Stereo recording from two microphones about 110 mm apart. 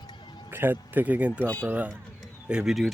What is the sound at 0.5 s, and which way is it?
Speech, 20° right (ahead or behind).